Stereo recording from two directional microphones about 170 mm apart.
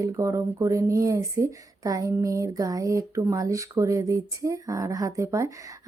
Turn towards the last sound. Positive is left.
turn(degrees=-20)  # may be behind; listen again after turning